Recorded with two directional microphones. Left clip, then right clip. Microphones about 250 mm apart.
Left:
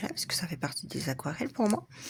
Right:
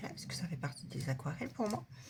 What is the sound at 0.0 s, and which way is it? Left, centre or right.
Speech, left.